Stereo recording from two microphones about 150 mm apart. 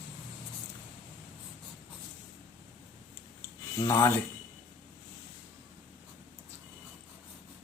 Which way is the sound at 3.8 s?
20° left (ahead or behind).